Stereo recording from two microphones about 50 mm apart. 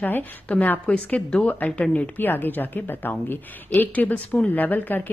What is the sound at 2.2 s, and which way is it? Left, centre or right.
A woman's voice, left.